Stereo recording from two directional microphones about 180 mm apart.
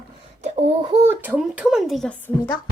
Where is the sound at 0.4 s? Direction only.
35° right (ahead or behind).